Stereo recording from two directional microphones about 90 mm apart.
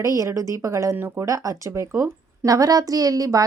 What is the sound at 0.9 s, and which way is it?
Speech, 25° right (ahead or behind).